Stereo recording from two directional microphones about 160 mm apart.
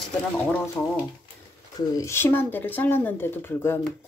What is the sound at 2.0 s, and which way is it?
Speech, 15° left (ahead or behind).